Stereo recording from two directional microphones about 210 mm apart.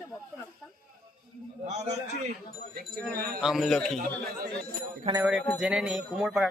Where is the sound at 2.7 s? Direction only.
45° right (ahead or behind).